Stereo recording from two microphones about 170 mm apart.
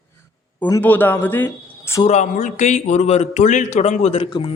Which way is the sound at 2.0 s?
45° left (ahead or behind).